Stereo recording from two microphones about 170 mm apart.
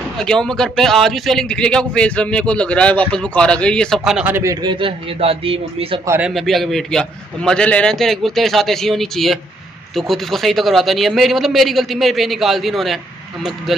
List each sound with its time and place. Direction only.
0.2 s a man's voice: 5° left (ahead or behind)
4.3 s a man's voice: 20° right (ahead or behind); by 5.9 s 35° right (ahead or behind)
6.0 s a man's voice: 10° right (ahead or behind)
6.3 s a man's voice: centre (ahead or behind)